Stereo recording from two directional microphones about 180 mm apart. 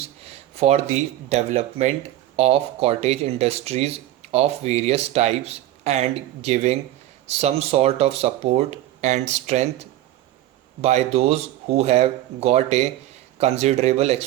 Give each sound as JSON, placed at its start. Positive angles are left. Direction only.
{"t": 0.5, "sound": "speech", "side_deg": -35}